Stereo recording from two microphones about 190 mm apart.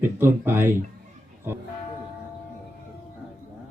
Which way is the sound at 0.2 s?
10° right (ahead or behind).